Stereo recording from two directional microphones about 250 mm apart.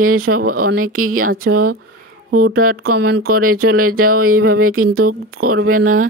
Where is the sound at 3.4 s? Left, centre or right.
Right.